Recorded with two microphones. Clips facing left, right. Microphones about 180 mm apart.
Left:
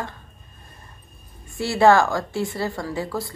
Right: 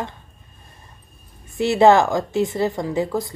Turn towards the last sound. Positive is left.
turn(degrees=-20)  # may be behind; listen again after turning